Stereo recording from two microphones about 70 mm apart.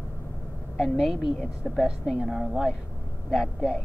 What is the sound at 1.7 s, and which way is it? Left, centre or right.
Speech, centre.